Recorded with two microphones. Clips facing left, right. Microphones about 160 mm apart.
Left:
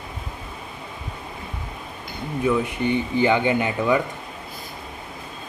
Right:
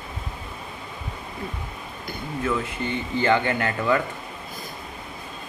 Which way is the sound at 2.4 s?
15° left (ahead or behind).